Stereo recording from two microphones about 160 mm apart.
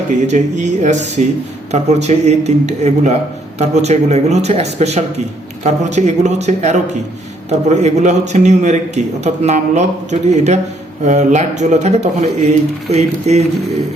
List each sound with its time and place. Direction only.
0.1 s a man's voice: 50° right (ahead or behind)